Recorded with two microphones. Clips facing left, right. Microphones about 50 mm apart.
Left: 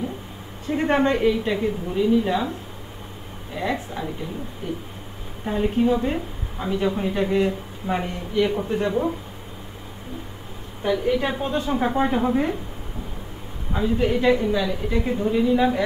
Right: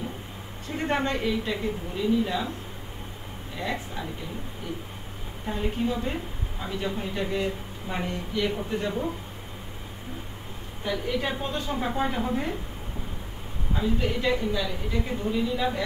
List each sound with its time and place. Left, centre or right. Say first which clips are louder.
0.7 s speech: left 7 dB; centre
5.5 s a woman's voice: left 8 dB; centre
10.9 s a woman's voice: left 7 dB; centre
13.7 s speech: left 6 dB; centre